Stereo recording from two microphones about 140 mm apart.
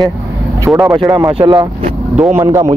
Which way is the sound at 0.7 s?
5° right (ahead or behind).